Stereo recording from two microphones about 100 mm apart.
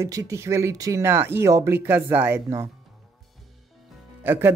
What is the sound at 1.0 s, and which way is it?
A woman's voice, 20° right (ahead or behind).